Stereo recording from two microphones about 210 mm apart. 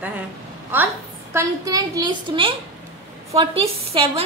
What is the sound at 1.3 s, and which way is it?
A woman's voice, 15° right (ahead or behind).